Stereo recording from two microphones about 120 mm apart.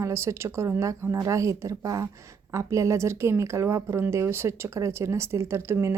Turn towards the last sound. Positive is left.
turn(degrees=-20)  # may be behind; listen again after turning